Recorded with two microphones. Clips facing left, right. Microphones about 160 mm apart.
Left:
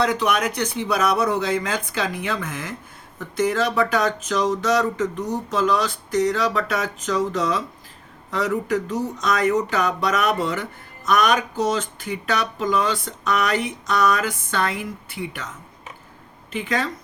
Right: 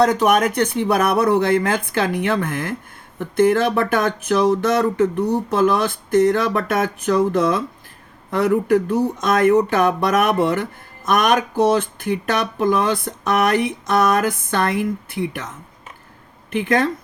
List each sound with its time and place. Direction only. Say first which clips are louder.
0.0 s speech: right 6 dB; 45° right (ahead or behind)
16.5 s speech: right 6 dB; 55° right (ahead or behind)